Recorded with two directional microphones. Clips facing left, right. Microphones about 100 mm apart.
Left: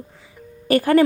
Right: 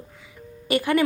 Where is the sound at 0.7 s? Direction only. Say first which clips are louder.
Left 6 dB; 40° left (ahead or behind).